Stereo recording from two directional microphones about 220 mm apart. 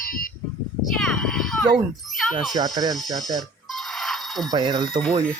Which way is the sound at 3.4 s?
Centre (ahead or behind).